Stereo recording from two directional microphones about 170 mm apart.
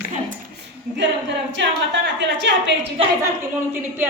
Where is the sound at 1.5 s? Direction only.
90° right.